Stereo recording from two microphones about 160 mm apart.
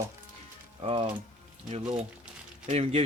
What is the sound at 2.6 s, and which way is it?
Speech, 40° right (ahead or behind).